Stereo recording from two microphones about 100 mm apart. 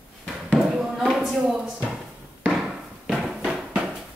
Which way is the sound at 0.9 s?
Centre (ahead or behind).